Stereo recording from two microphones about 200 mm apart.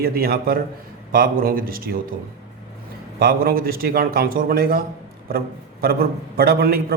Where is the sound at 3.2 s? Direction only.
50° right (ahead or behind).